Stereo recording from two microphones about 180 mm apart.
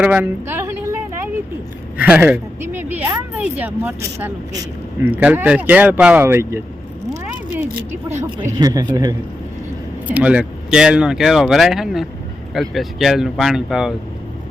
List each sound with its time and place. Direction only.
0.0 s a sound: 10° right (ahead or behind)
2.0 s speech: 10° right (ahead or behind)
8.1 s speech: 15° right (ahead or behind)
10.1 s speech: 5° right (ahead or behind)